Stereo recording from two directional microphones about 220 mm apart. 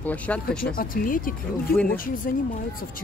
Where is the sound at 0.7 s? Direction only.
40° left (ahead or behind).